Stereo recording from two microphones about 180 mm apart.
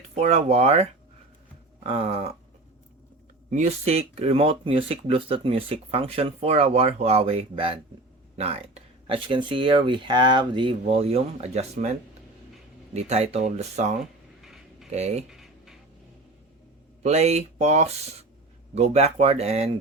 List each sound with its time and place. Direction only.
0.1 s speech: 35° right (ahead or behind)
3.5 s speech: 40° right (ahead or behind)
14.4 s a sound: centre (ahead or behind)
14.8 s speech: 35° right (ahead or behind)
15.3 s writing: centre (ahead or behind)
17.0 s speech: 35° right (ahead or behind)